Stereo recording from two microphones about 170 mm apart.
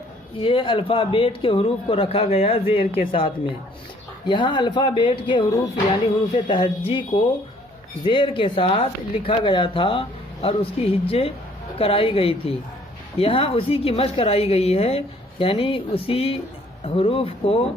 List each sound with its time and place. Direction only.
0.3 s speech: 30° left (ahead or behind)